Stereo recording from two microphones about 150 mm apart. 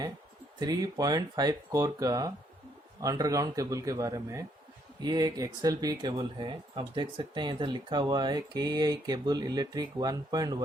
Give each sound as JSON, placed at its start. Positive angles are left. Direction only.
{"t": 0.6, "sound": "speech", "side_deg": -25}